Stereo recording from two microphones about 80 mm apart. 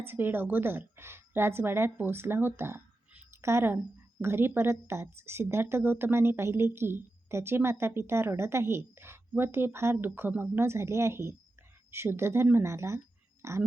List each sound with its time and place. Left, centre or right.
0.0 s a woman's voice: right